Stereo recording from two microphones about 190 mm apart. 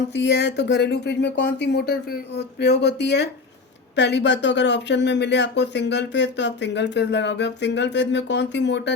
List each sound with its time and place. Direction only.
0.1 s speech: 65° left (ahead or behind)